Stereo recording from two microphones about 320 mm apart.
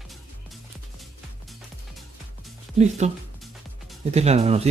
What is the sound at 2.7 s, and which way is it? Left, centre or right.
Speech, right.